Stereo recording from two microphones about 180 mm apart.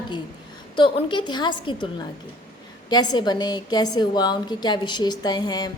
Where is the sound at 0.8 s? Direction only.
25° left (ahead or behind).